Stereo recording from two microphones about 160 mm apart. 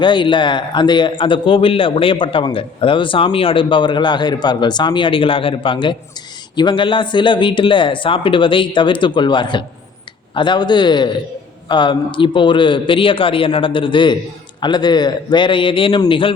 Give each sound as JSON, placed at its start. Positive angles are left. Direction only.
{"t": 0.0, "sound": "a man's voice", "side_deg": 30}